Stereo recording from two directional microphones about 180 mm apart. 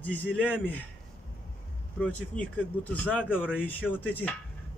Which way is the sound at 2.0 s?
5° left (ahead or behind).